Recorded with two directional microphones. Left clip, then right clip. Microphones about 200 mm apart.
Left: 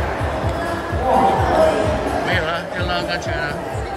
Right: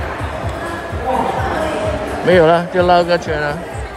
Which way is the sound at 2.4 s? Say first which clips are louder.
Right 11 dB; centre (ahead or behind).